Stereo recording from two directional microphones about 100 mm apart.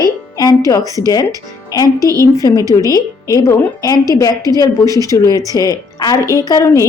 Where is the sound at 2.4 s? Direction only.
35° left (ahead or behind).